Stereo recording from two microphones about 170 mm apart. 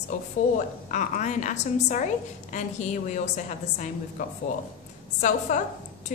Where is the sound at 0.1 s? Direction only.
50° left (ahead or behind).